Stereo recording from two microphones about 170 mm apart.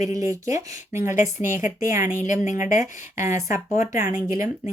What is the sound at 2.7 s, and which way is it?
Speech, 15° right (ahead or behind).